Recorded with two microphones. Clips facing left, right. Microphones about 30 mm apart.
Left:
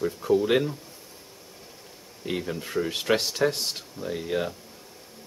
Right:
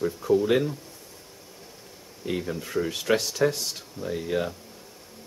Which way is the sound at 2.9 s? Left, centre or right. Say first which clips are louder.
Left 1 dB; left.